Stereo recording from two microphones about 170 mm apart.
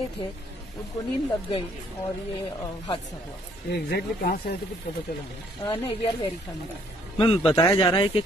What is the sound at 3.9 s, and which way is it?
Speech, 70° left (ahead or behind).